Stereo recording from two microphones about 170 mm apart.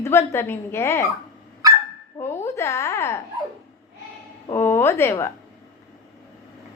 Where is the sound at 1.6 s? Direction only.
20° right (ahead or behind).